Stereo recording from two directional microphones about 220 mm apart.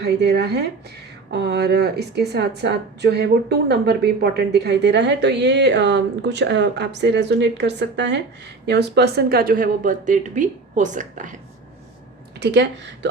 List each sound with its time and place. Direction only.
0.0 s a woman's voice: 50° right (ahead or behind)
12.4 s a woman's voice: 50° right (ahead or behind)